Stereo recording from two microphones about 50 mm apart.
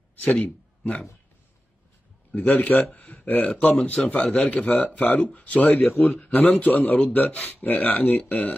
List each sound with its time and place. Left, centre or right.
0.1 s a sound: left
2.3 s speech: left
3.3 s speech: centre